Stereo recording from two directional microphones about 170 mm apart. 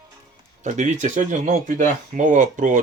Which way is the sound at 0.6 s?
45° right (ahead or behind).